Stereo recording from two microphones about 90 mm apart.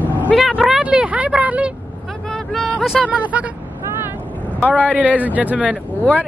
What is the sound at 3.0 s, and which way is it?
Speech, 15° right (ahead or behind).